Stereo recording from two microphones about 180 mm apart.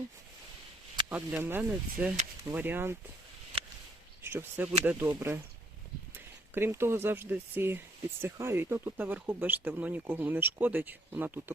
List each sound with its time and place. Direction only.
1.1 s speech: 10° right (ahead or behind)
3.5 s a sound: 30° right (ahead or behind)
4.2 s speech: 10° right (ahead or behind)